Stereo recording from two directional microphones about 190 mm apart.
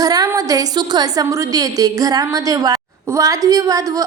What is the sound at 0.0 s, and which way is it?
A woman's voice, 20° right (ahead or behind).